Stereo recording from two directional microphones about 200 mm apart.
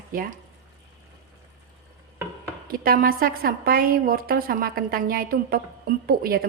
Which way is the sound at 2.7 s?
45° right (ahead or behind).